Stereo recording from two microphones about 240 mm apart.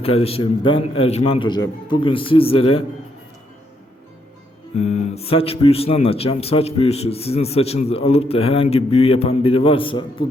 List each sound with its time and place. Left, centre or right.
0.0 s speech: left
4.7 s speech: left